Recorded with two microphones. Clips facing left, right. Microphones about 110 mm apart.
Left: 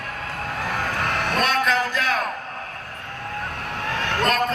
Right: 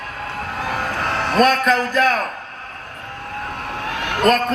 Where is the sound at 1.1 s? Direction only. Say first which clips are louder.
Right 8 dB; 40° right (ahead or behind).